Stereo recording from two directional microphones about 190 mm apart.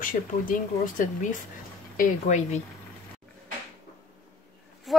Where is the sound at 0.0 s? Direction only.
45° left (ahead or behind).